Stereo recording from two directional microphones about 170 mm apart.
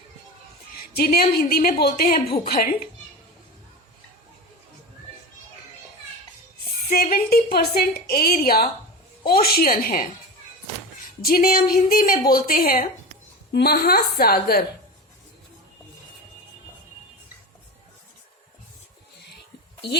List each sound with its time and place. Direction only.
0.9 s a woman's voice: 60° left (ahead or behind)
6.9 s a woman's voice: 60° left (ahead or behind)
11.2 s a woman's voice: 60° left (ahead or behind)
13.5 s a woman's voice: 70° left (ahead or behind)